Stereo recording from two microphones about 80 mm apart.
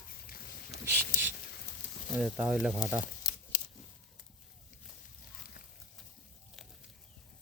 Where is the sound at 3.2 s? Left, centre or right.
Left.